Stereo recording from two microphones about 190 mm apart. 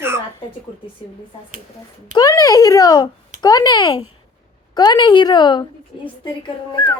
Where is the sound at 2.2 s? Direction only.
20° left (ahead or behind).